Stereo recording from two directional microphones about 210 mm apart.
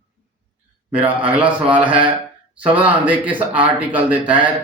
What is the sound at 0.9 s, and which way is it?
Speech, 10° right (ahead or behind).